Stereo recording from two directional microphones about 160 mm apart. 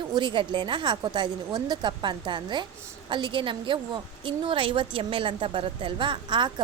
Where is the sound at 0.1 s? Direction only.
30° right (ahead or behind).